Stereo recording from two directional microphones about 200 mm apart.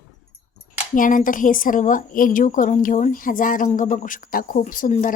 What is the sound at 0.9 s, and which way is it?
A woman's voice, 40° left (ahead or behind).